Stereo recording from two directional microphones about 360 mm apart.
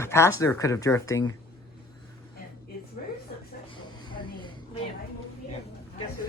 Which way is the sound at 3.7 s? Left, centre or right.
Centre.